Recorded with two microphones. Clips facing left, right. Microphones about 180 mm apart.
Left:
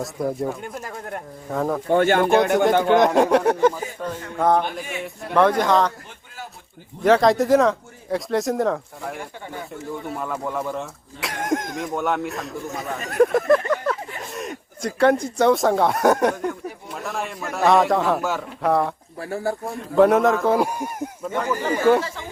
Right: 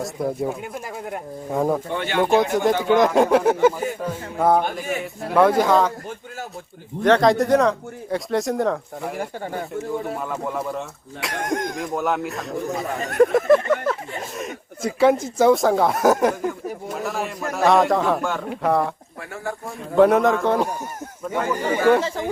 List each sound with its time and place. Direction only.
0.0 s speech: centre (ahead or behind)
1.9 s speech: 45° left (ahead or behind)
2.4 s speech: centre (ahead or behind)
4.9 s speech: 40° right (ahead or behind)
5.3 s speech: 5° right (ahead or behind)
7.0 s speech: centre (ahead or behind)
9.1 s speech: 40° right (ahead or behind)
10.2 s speech: centre (ahead or behind)
19.2 s speech: 35° left (ahead or behind)
19.6 s speech: centre (ahead or behind)
21.2 s speech: 5° right (ahead or behind)